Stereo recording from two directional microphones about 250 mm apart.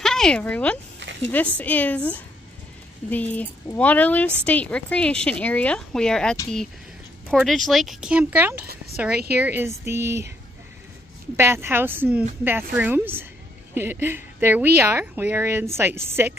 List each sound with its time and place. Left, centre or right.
0.0 s speech: centre
1.0 s a sound: right
1.6 s speech: centre
3.1 s a woman's voice: centre
11.3 s a woman's voice: centre